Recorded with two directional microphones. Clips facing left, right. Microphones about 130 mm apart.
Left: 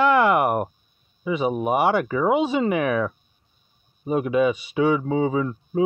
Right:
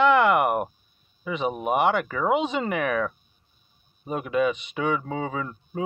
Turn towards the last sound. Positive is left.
turn(degrees=15)  # may be behind; listen again after turning